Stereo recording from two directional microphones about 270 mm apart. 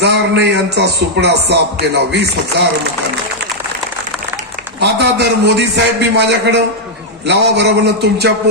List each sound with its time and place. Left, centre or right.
0.0 s speech: right
4.7 s speech: right